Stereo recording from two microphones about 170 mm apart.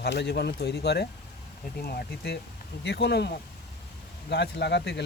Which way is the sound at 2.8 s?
80° left.